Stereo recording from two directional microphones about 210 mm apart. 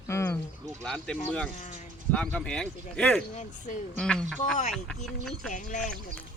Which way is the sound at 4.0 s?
5° left (ahead or behind).